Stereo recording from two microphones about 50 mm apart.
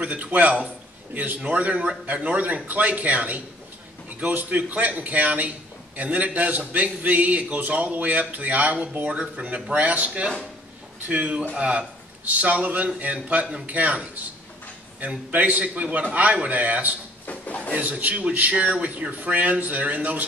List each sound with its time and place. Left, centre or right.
0.0 s a man's voice: right